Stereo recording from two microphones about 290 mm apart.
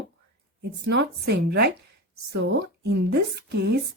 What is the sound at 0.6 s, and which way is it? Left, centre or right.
A woman's voice, right.